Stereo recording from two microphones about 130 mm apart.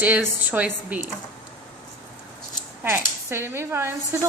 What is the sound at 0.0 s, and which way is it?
A woman's voice, 15° right (ahead or behind).